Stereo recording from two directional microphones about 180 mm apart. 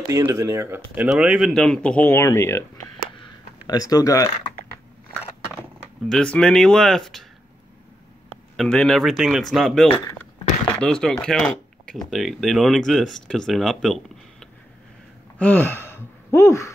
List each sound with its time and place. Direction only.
0.1 s speech: 15° right (ahead or behind); by 2.6 s 15° left (ahead or behind)
3.6 s speech: 20° left (ahead or behind)
6.0 s speech: 5° left (ahead or behind)
8.5 s speech: 5° left (ahead or behind)